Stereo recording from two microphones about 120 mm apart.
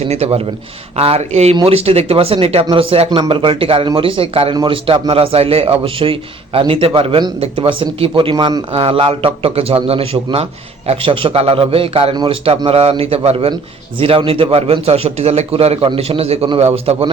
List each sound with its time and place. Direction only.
0.0 s a man's voice: 60° right (ahead or behind)
12.1 s a man's voice: 40° right (ahead or behind)
12.5 s a man's voice: 55° right (ahead or behind)